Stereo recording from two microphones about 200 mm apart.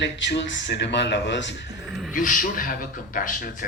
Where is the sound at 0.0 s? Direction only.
60° left (ahead or behind).